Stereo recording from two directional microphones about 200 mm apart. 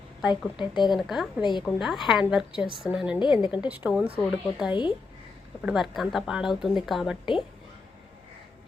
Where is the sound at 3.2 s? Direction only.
25° left (ahead or behind).